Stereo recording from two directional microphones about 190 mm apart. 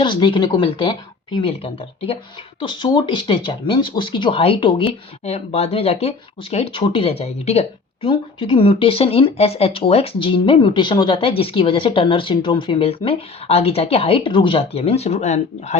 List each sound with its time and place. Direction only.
0.0 s speech: 25° left (ahead or behind)